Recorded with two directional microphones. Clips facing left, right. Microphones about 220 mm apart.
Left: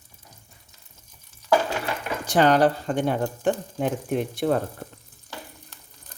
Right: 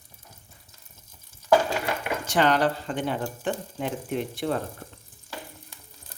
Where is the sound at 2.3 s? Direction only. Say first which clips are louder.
Left 4 dB; 40° left (ahead or behind).